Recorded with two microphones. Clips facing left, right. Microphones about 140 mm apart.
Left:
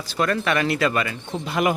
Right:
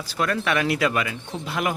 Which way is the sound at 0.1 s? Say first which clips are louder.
Left 2 dB; 5° right (ahead or behind).